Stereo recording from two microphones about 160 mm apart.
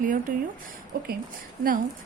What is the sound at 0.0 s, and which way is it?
Speech, 55° right (ahead or behind).